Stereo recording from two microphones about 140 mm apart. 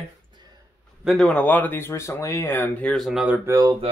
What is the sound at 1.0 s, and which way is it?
Speech, centre (ahead or behind).